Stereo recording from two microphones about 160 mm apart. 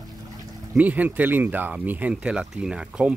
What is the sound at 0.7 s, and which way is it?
Speech, 10° right (ahead or behind).